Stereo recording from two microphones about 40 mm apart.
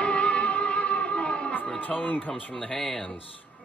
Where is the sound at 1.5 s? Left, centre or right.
Left.